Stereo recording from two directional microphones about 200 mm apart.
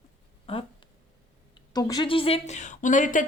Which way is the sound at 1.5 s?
20° left (ahead or behind).